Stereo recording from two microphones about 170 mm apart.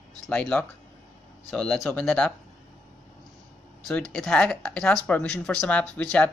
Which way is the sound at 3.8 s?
5° left (ahead or behind).